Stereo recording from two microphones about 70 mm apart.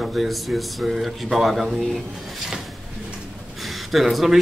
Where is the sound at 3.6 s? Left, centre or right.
Centre.